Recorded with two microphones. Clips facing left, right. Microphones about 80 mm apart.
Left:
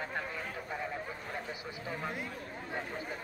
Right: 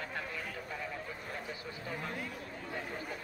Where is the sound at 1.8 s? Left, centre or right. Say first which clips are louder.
Left 2 dB; centre.